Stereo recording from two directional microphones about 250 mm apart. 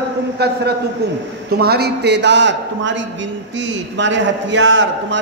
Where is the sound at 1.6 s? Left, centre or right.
Right.